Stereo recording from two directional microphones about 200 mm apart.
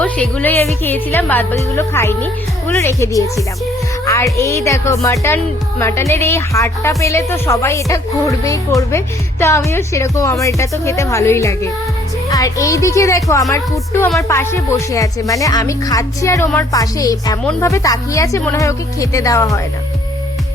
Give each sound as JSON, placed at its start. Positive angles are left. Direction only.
{"t": 0.0, "sound": "speech", "side_deg": 5}